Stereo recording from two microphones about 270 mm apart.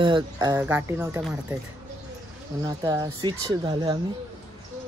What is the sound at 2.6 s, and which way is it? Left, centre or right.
Speech, centre.